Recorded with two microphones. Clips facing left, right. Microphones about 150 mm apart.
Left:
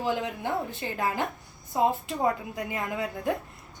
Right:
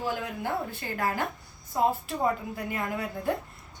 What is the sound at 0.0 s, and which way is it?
A woman's voice, 20° left (ahead or behind).